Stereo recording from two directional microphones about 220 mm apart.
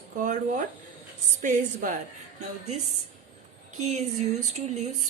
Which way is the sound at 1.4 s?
35° right (ahead or behind).